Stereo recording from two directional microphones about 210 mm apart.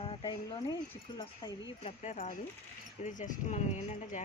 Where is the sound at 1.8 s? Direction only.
35° left (ahead or behind).